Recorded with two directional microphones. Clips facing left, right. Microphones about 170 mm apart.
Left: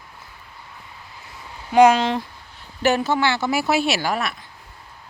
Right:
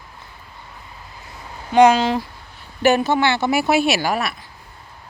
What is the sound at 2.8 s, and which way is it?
A woman's voice, 15° right (ahead or behind).